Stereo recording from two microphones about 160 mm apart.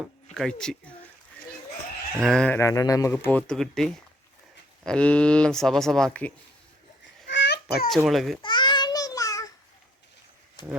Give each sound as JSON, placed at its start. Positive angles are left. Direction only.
{"t": 0.3, "sound": "speech", "side_deg": 5}
{"t": 2.2, "sound": "speech", "side_deg": 5}
{"t": 2.6, "sound": "speech", "side_deg": 20}
{"t": 7.3, "sound": "a sound", "side_deg": 90}
{"t": 8.0, "sound": "speech", "side_deg": 0}
{"t": 8.4, "sound": "babbling", "side_deg": 30}